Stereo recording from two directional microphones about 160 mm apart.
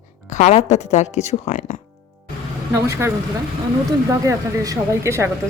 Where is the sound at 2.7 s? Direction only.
20° right (ahead or behind).